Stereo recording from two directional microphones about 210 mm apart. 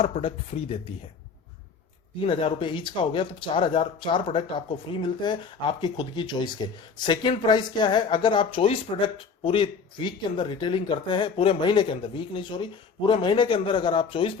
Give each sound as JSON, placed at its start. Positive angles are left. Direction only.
{"t": 0.0, "sound": "speech", "side_deg": 25}
{"t": 2.2, "sound": "speech", "side_deg": 25}